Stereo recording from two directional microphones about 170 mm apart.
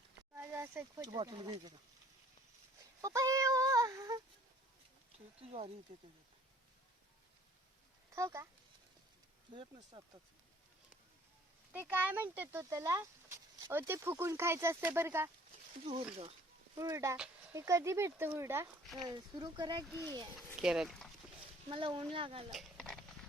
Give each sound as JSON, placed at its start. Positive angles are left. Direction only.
{"t": 0.3, "sound": "a sound", "side_deg": -15}
{"t": 1.0, "sound": "speech", "side_deg": -25}
{"t": 3.0, "sound": "a sound", "side_deg": -20}
{"t": 5.4, "sound": "speech", "side_deg": -35}
{"t": 8.1, "sound": "speech", "side_deg": -15}
{"t": 9.5, "sound": "speech", "side_deg": -30}
{"t": 11.7, "sound": "speech", "side_deg": -10}
{"t": 16.7, "sound": "speech", "side_deg": -20}
{"t": 20.6, "sound": "speech", "side_deg": -5}
{"t": 21.7, "sound": "speech", "side_deg": -30}
{"t": 22.5, "sound": "a sound", "side_deg": 5}